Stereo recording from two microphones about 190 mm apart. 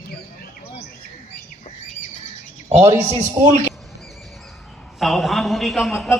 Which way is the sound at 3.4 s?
20° right (ahead or behind).